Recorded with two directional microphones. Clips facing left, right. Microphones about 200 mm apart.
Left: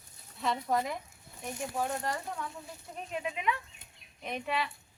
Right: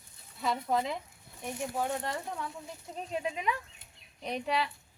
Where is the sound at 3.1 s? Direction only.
30° right (ahead or behind).